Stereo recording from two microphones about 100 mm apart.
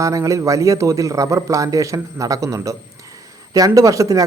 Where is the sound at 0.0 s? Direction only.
30° right (ahead or behind).